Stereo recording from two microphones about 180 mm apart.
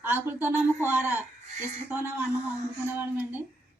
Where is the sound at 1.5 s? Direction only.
45° right (ahead or behind).